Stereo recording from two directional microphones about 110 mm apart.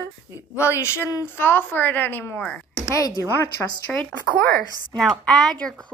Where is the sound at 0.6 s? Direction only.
25° left (ahead or behind).